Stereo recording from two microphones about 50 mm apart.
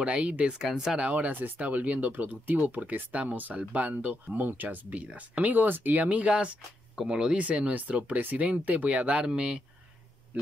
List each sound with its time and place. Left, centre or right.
0.0 s speech: right
0.6 s speech: centre
1.1 s speech: right; by 7.4 s centre
7.4 s speech: right